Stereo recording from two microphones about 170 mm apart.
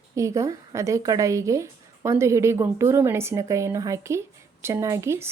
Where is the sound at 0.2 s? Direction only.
20° right (ahead or behind).